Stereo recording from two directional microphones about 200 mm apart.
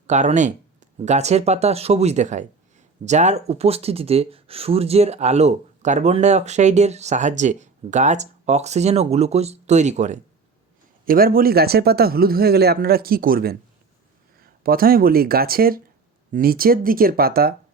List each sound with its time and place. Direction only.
0.1 s speech: 35° right (ahead or behind)
11.0 s speech: 45° right (ahead or behind)
14.6 s speech: 45° right (ahead or behind)